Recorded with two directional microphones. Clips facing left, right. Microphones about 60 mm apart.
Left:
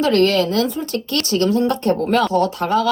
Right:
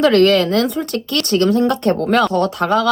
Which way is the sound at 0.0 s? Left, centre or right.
Right.